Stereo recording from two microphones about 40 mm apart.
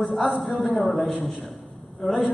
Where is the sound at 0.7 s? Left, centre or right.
Centre.